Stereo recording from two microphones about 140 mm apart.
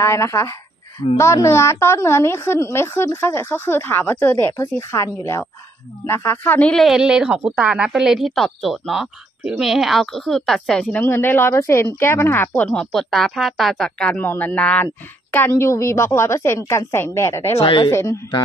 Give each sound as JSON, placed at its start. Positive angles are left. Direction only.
{"t": 0.0, "sound": "a woman's voice", "side_deg": 20}
{"t": 17.6, "sound": "speech", "side_deg": 35}
{"t": 17.9, "sound": "a woman's voice", "side_deg": 20}